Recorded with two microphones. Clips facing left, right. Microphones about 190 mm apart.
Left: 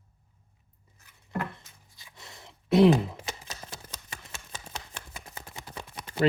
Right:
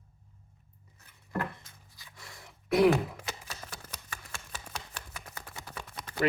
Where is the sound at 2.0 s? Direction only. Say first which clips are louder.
Left 2 dB; 25° left (ahead or behind).